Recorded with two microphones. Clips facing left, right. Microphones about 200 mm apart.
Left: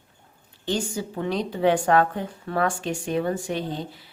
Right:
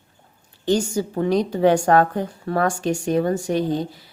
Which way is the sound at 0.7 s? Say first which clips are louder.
Right 7 dB; 45° right (ahead or behind).